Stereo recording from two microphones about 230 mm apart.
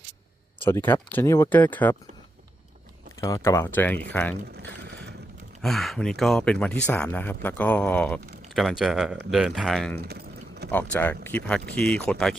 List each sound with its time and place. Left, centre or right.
0.6 s speech: centre
3.2 s speech: centre
4.6 s boat: right
5.6 s speech: centre
10.0 s a sound: right
10.7 s speech: centre